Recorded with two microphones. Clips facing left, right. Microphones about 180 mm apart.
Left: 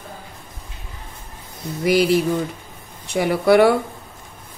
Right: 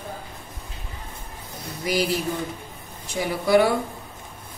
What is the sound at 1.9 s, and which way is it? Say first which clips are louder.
Speech: left 7 dB; 65° left (ahead or behind).